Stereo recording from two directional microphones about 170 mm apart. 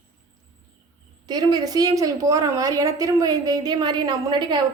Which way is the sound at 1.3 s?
25° right (ahead or behind).